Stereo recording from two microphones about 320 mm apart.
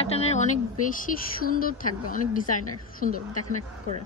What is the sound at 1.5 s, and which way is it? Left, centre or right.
Speech, left.